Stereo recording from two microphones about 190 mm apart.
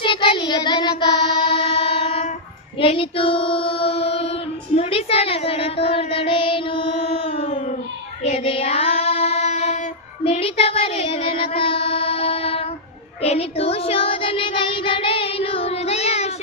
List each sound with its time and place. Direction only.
0.0 s child singing: 25° left (ahead or behind)
1.5 s train: 30° left (ahead or behind)
2.7 s child singing: 30° left (ahead or behind)